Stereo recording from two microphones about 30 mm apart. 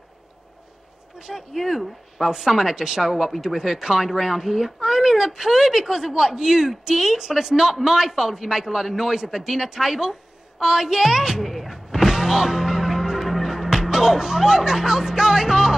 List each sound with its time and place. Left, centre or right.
1.2 s a woman's voice: centre
11.4 s a sound: centre
11.7 s music: centre
13.4 s speech: centre